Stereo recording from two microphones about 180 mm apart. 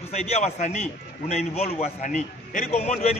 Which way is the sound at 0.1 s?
40° left (ahead or behind).